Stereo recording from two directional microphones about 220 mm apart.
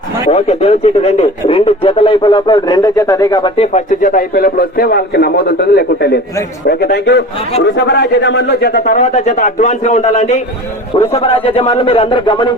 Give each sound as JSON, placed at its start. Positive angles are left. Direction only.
{"t": 0.3, "sound": "a man's voice", "side_deg": 30}